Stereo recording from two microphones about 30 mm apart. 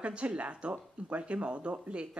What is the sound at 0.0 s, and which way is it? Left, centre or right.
Speech, right.